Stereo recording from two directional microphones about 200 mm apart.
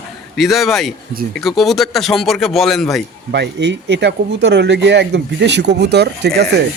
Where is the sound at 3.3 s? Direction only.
60° right (ahead or behind).